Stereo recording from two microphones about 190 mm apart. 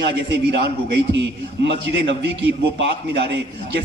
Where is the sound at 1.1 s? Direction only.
65° right (ahead or behind).